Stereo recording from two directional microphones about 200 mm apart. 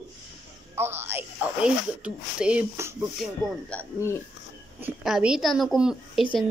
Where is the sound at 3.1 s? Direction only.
5° left (ahead or behind).